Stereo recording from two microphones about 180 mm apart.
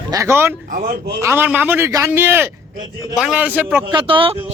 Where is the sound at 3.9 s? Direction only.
30° right (ahead or behind).